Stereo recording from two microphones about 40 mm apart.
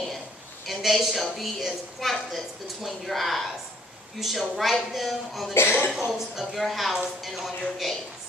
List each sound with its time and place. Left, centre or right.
0.7 s a woman's voice: centre
5.6 s speech: left
5.9 s a woman's voice: centre